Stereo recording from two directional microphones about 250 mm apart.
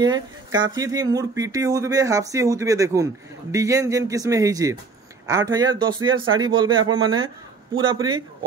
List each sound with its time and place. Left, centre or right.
0.0 s speech: centre